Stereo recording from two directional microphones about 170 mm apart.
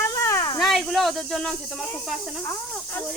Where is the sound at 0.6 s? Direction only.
Centre (ahead or behind).